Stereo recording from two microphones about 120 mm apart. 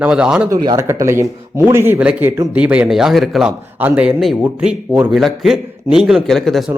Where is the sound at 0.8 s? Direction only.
25° right (ahead or behind); by 3.5 s centre (ahead or behind).